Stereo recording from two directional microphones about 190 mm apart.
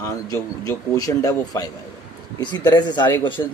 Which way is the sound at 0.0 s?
20° left (ahead or behind).